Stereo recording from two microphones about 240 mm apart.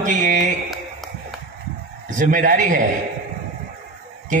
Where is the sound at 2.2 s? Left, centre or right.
Right.